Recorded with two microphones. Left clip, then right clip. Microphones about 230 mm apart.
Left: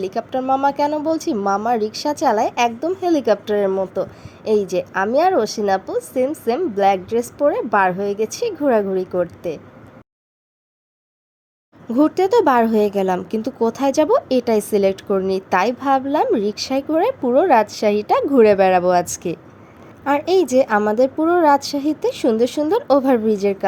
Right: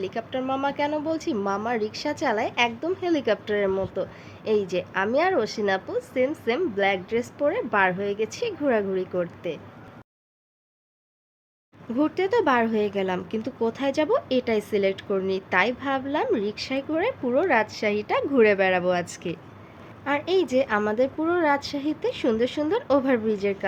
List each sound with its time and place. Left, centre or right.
0.0 s speech: centre
11.9 s speech: centre